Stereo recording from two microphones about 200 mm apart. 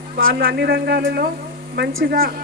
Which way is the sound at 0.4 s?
50° right (ahead or behind).